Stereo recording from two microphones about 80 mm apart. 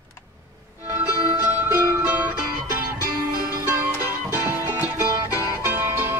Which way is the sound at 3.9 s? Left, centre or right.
Right.